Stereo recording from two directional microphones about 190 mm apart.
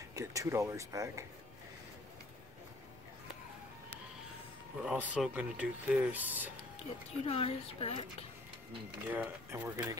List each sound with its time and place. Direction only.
0.1 s speech: 15° right (ahead or behind)
4.8 s speech: 5° right (ahead or behind)
6.8 s speech: 30° left (ahead or behind)
9.1 s speech: 10° right (ahead or behind)